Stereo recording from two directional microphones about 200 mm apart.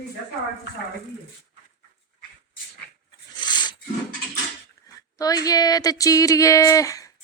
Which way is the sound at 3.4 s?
20° left (ahead or behind).